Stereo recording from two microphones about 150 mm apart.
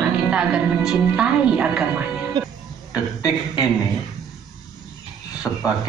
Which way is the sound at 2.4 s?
25° right (ahead or behind).